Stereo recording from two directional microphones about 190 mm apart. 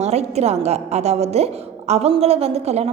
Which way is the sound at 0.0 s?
35° right (ahead or behind).